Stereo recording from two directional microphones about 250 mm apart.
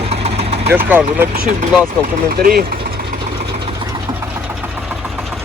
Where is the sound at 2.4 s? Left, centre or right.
Right.